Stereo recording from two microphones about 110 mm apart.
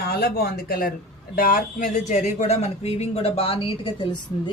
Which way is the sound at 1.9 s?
90° left.